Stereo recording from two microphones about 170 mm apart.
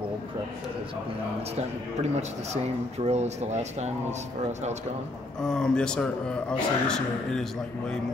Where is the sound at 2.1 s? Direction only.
40° right (ahead or behind).